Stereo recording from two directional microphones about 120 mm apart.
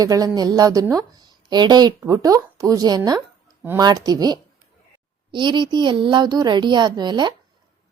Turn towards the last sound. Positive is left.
turn(degrees=-40)  # may be behind; listen again after turning